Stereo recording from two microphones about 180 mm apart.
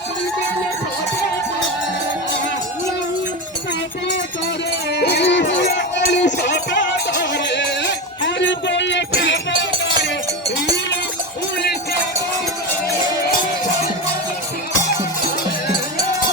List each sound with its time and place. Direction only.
4.9 s music: 65° left (ahead or behind); by 10.2 s 85° left